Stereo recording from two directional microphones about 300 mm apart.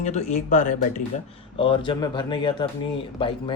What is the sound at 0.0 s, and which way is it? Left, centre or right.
Speech, left.